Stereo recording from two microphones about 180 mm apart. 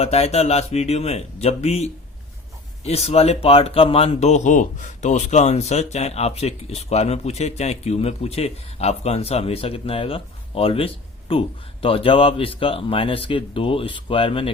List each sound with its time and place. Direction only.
0.0 s speech: 35° left (ahead or behind)